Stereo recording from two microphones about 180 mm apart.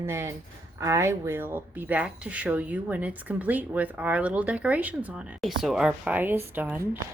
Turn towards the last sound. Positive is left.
turn(degrees=-10)  # may be behind; listen again after turning